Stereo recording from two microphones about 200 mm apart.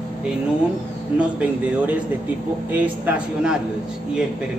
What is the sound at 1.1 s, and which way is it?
A man's voice, 5° right (ahead or behind).